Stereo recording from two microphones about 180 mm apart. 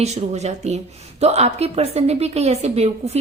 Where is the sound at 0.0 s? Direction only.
35° right (ahead or behind).